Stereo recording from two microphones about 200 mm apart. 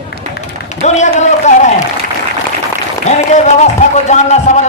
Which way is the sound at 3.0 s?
35° left (ahead or behind).